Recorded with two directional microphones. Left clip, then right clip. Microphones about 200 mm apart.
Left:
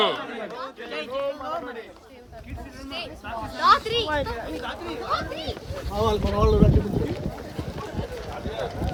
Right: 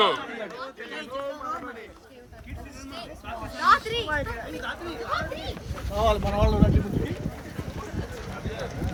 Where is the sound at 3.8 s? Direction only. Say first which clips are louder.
Left 3 dB; 50° left (ahead or behind).